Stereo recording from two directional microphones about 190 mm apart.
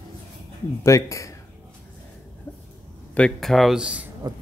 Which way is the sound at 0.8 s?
15° left (ahead or behind).